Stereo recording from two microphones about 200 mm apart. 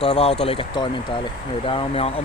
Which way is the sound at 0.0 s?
30° left (ahead or behind).